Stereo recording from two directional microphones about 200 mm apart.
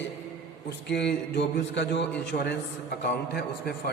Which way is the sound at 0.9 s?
60° left (ahead or behind).